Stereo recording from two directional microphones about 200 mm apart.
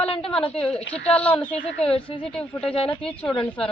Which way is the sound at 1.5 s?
30° left (ahead or behind).